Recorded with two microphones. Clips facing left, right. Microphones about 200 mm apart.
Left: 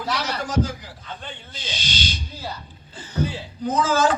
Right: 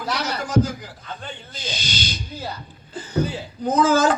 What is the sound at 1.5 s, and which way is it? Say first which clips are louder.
Speech: right 2 dB; 40° right (ahead or behind).